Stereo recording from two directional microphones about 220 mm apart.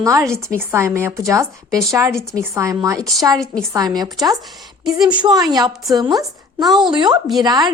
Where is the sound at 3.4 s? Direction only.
Centre (ahead or behind).